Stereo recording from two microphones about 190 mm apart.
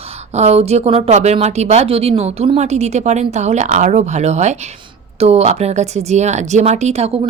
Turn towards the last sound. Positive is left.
turn(degrees=-35)  # may be behind; listen again after turning